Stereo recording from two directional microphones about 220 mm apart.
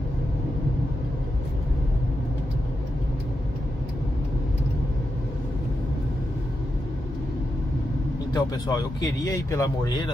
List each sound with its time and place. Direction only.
8.3 s speech: 15° left (ahead or behind)